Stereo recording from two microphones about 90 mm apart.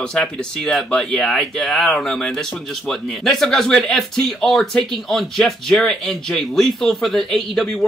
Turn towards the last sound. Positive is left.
turn(degrees=5)  # may be behind; listen again after turning